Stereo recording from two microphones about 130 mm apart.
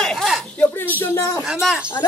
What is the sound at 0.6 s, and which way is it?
Speech, 15° left (ahead or behind).